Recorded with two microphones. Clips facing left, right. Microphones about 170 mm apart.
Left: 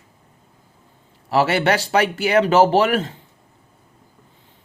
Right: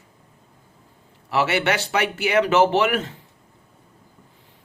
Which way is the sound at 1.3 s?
35° left (ahead or behind).